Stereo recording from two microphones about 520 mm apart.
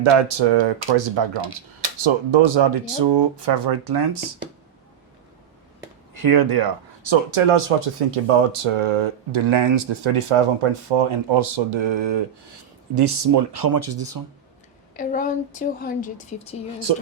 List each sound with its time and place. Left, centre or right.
0.0 s speech: right
6.2 s speech: right
7.1 s speech: right
14.9 s a woman's voice: centre